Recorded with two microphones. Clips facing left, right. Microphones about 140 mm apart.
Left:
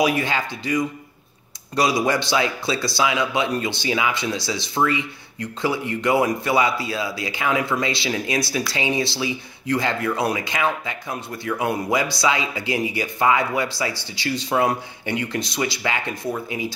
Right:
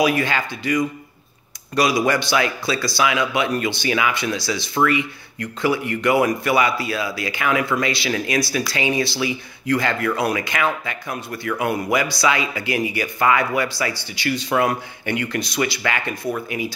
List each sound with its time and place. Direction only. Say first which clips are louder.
0.0 s speech: right 1 dB; 20° left (ahead or behind)
14.1 s speech: right 2 dB; 65° right (ahead or behind)
14.5 s speech: even; 25° left (ahead or behind)